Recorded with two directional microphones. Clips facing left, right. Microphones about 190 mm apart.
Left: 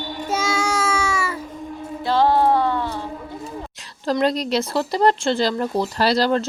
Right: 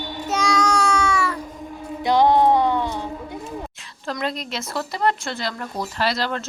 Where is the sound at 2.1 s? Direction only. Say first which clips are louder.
Right 1 dB; 15° right (ahead or behind).